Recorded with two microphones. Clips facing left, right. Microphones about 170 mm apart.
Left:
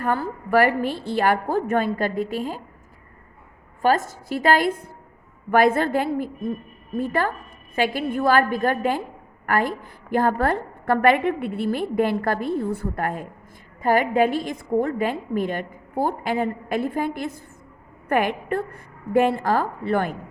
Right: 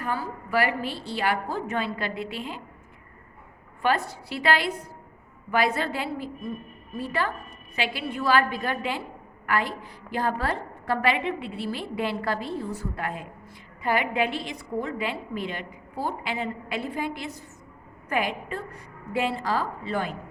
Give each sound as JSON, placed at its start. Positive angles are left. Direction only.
{"t": 0.0, "sound": "a woman's voice", "side_deg": 55}
{"t": 3.8, "sound": "a woman's voice", "side_deg": 45}